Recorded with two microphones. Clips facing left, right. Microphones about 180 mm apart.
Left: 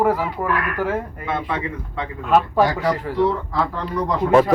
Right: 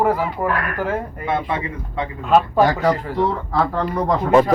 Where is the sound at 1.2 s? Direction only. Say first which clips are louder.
Right 2 dB; 15° right (ahead or behind).